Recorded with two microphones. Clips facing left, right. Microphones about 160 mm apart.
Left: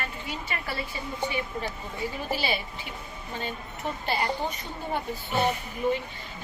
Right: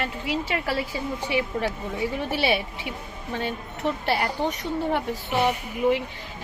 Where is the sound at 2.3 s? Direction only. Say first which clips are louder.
Right 5 dB; 70° right (ahead or behind).